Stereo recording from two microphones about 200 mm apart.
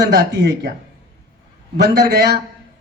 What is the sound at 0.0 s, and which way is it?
Speech, 60° right (ahead or behind).